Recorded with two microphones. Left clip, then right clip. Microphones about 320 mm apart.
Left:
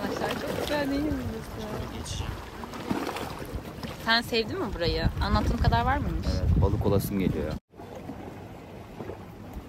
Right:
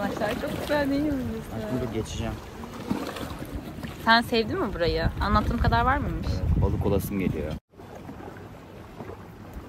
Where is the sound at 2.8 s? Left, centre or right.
Centre.